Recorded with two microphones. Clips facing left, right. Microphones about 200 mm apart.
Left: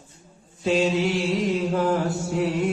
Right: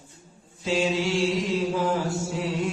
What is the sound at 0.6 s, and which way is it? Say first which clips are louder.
Mantra: left 3 dB; 55° left (ahead or behind).